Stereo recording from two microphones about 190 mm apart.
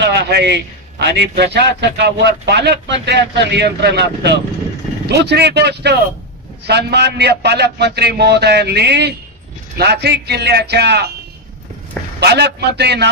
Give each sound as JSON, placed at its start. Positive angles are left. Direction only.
{"t": 0.0, "sound": "a man's voice", "side_deg": -60}
{"t": 12.2, "sound": "a man's voice", "side_deg": -60}